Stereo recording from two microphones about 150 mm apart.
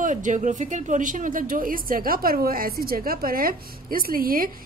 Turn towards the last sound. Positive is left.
turn(degrees=-75)  # may be behind; listen again after turning